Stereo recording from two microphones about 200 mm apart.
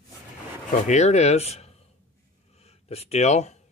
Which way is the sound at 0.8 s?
35° left (ahead or behind).